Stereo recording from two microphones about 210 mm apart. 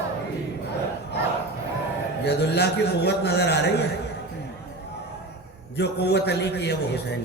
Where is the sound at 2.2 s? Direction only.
55° left (ahead or behind).